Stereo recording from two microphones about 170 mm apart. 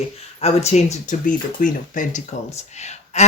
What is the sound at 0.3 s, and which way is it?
Speech, 40° left (ahead or behind).